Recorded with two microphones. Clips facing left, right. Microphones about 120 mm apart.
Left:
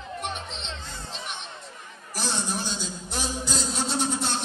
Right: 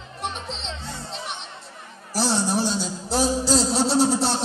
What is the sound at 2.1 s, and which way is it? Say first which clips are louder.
Music: right 8 dB; 35° right (ahead or behind).